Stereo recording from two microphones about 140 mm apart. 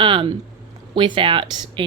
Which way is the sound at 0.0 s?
35° right (ahead or behind).